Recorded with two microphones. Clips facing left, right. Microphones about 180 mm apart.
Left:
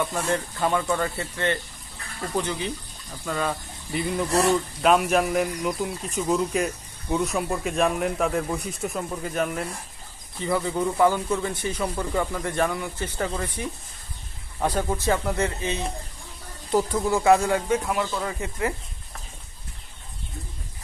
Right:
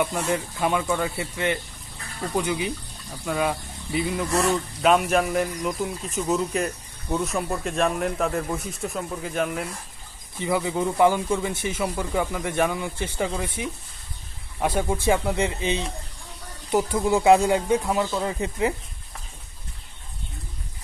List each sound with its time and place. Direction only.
0.0 s speech: 10° right (ahead or behind)
10.4 s speech: 15° right (ahead or behind)
11.8 s speech: 10° right (ahead or behind)